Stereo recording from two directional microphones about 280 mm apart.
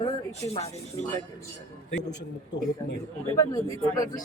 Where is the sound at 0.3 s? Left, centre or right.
Left.